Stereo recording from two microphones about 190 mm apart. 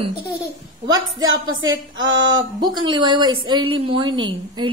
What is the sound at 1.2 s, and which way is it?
Speech, 90° right.